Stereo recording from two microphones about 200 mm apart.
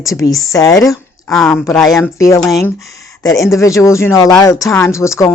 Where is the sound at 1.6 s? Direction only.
15° left (ahead or behind).